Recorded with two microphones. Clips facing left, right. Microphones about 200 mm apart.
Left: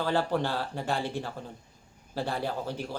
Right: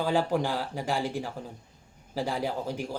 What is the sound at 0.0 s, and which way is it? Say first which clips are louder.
Speech: right 1 dB; 10° right (ahead or behind).